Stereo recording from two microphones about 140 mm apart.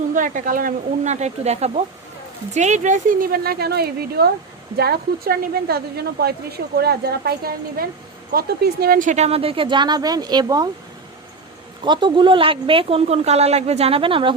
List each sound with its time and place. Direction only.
0.1 s a woman's voice: 70° right (ahead or behind); by 10.7 s 30° right (ahead or behind)
11.9 s speech: 35° right (ahead or behind)